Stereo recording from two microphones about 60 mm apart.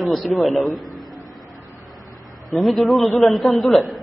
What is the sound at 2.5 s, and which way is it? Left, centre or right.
A man's voice, centre.